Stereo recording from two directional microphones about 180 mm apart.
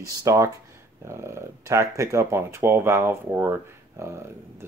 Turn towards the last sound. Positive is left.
turn(degrees=-15)  # may be behind; listen again after turning